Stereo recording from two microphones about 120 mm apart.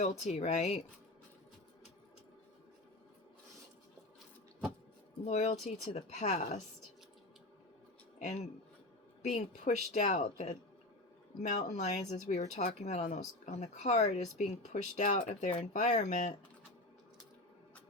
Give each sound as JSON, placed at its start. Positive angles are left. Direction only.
{"t": 0.0, "sound": "speech", "side_deg": 65}
{"t": 5.2, "sound": "speech", "side_deg": 65}
{"t": 9.2, "sound": "speech", "side_deg": 70}